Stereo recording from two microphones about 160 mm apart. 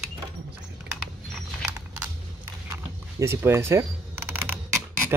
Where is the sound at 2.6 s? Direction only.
15° right (ahead or behind).